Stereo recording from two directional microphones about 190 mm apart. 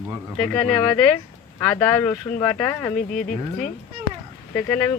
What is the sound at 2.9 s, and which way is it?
Speech, 45° left (ahead or behind).